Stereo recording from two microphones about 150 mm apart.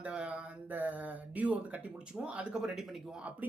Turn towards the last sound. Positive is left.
turn(degrees=-5)  # may be behind; listen again after turning